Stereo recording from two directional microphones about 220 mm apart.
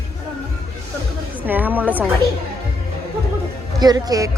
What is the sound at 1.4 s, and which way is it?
Speech, 10° right (ahead or behind).